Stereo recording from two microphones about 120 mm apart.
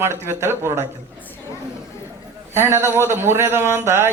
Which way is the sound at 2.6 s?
20° right (ahead or behind).